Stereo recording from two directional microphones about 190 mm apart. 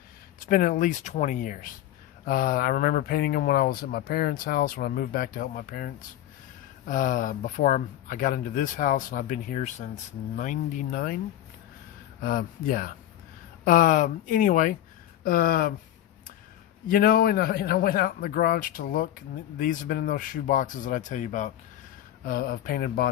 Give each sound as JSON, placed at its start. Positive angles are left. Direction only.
{"t": 0.3, "sound": "speech", "side_deg": 45}
{"t": 12.2, "sound": "speech", "side_deg": 45}
{"t": 16.9, "sound": "speech", "side_deg": 50}